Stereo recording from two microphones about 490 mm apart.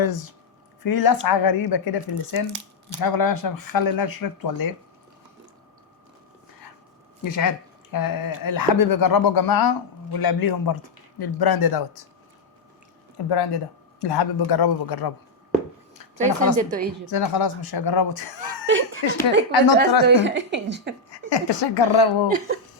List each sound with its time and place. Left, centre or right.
0.0 s a man's voice: left
7.9 s a man's voice: left
13.3 s a man's voice: left
16.1 s a woman's voice: centre
17.1 s a man's voice: left
18.3 s a woman's voice: right
21.1 s speech: left